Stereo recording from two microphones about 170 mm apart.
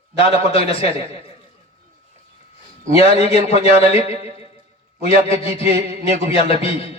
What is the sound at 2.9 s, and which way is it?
Speech, 35° left (ahead or behind).